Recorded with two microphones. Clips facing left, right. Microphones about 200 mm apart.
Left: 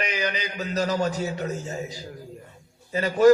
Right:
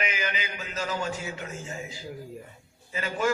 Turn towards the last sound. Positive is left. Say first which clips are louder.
# left 11 dB
turn(degrees=40)  # may be behind; listen again after turning